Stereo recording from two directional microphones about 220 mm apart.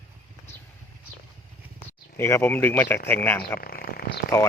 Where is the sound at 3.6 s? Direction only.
45° left (ahead or behind).